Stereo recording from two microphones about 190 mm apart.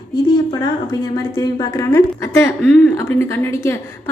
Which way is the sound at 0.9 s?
20° left (ahead or behind).